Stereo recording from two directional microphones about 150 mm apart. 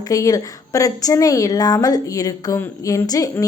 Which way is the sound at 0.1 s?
20° left (ahead or behind).